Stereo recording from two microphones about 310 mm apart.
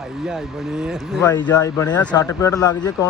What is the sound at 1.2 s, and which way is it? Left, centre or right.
Speech, centre.